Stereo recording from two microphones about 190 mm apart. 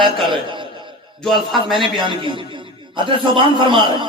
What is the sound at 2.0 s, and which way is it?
A man's voice, 25° right (ahead or behind).